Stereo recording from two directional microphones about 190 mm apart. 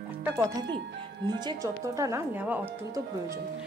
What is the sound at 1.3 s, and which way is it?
Speech, 20° right (ahead or behind).